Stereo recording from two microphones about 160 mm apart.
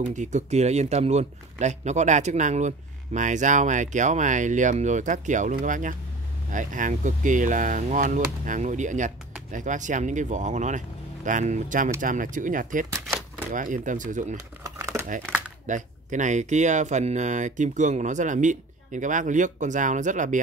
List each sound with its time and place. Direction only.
0.1 s speech: 45° right (ahead or behind)
14.3 s crumpling: 20° right (ahead or behind)
15.6 s speech: 50° right (ahead or behind)